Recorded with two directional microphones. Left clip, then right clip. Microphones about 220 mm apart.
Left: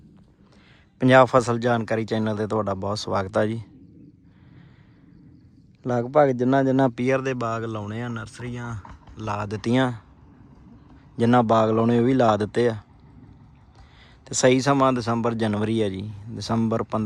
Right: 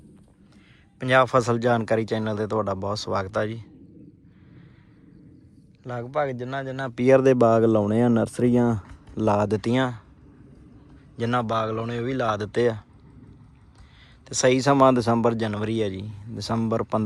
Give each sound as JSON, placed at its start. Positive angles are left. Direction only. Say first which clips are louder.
{"t": 0.9, "sound": "speech", "louder": "left 3 dB", "side_deg": 20}
{"t": 5.8, "sound": "speech", "louder": "left 8 dB", "side_deg": 30}
{"t": 6.9, "sound": "speech", "louder": "right 6 dB", "side_deg": 10}
{"t": 11.2, "sound": "speech", "louder": "left 6 dB", "side_deg": 20}
{"t": 14.3, "sound": "speech", "louder": "left 1 dB", "side_deg": 15}